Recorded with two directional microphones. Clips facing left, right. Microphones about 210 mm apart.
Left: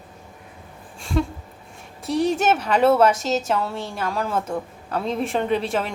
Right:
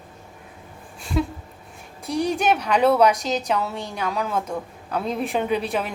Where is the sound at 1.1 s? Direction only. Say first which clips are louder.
Left 1 dB; 5° right (ahead or behind).